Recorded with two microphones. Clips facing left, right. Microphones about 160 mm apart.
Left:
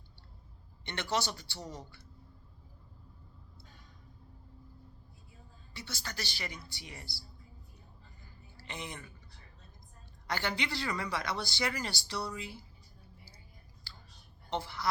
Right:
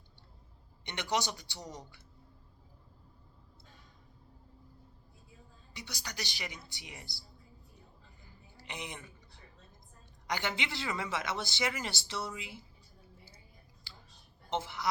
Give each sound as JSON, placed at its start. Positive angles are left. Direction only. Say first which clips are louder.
{"t": 0.9, "sound": "speech", "louder": "even", "side_deg": -15}
{"t": 5.7, "sound": "speech", "louder": "left 1 dB", "side_deg": -15}
{"t": 8.5, "sound": "a woman's voice", "louder": "even", "side_deg": -20}
{"t": 10.2, "sound": "speech", "louder": "left 1 dB", "side_deg": -20}
{"t": 13.9, "sound": "a sound", "louder": "even", "side_deg": -20}
{"t": 14.5, "sound": "speech", "louder": "right 1 dB", "side_deg": -20}